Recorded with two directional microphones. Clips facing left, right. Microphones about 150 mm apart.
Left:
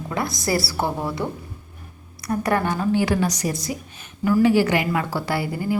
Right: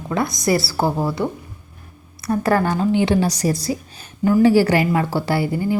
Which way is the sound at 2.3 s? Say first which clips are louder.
Right 4 dB; 30° right (ahead or behind).